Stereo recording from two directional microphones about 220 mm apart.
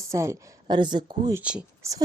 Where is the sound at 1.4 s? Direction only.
5° right (ahead or behind).